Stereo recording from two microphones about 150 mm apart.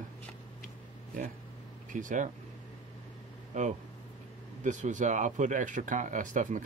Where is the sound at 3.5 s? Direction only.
50° right (ahead or behind).